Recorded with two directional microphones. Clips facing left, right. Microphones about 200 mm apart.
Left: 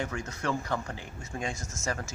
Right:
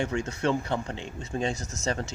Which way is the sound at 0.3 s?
25° right (ahead or behind).